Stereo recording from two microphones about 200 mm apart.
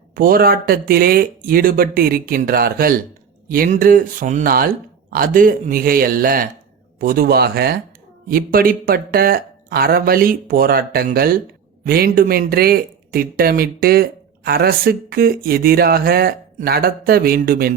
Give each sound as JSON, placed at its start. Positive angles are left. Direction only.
{"t": 0.2, "sound": "speech", "side_deg": -45}